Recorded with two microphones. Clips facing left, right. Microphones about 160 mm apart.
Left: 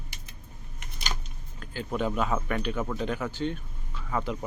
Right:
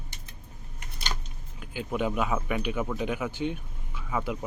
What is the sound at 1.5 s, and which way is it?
Speech, 10° right (ahead or behind).